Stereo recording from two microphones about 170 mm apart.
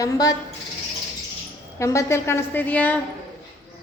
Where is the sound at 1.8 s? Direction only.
15° left (ahead or behind).